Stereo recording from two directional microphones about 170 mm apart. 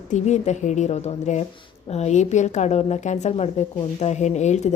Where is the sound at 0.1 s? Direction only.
40° left (ahead or behind).